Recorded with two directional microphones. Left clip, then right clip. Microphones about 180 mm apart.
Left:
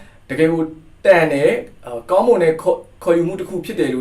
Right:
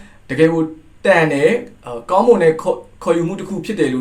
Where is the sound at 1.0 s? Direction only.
25° right (ahead or behind).